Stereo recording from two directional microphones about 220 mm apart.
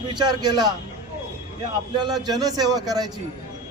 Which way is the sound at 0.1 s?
20° right (ahead or behind).